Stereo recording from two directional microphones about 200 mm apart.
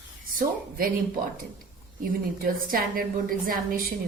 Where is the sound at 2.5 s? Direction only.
45° right (ahead or behind).